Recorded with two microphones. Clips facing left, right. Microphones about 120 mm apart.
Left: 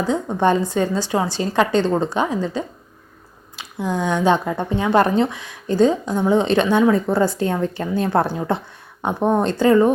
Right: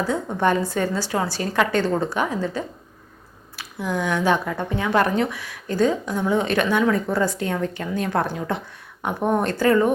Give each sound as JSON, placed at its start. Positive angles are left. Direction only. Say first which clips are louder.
{"t": 0.1, "sound": "a woman's voice", "louder": "left 5 dB", "side_deg": 20}